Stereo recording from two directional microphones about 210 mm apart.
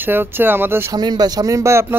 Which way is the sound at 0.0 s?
10° right (ahead or behind).